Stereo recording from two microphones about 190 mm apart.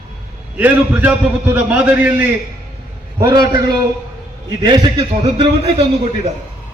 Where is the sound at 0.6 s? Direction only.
10° right (ahead or behind); by 5.8 s 25° right (ahead or behind).